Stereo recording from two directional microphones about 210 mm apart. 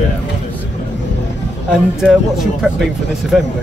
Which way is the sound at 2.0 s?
Centre (ahead or behind).